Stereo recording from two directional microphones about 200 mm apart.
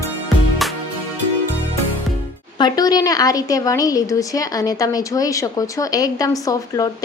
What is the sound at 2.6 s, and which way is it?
A woman's voice, 20° left (ahead or behind).